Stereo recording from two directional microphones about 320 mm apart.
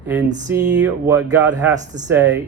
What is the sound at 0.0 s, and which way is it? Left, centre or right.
Speech, centre.